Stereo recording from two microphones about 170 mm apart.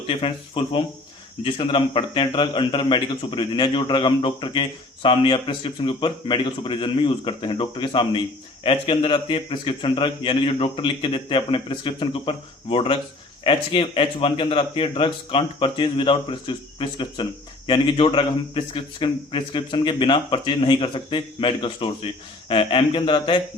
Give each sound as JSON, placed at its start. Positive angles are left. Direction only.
{"t": 0.1, "sound": "a man's voice", "side_deg": 35}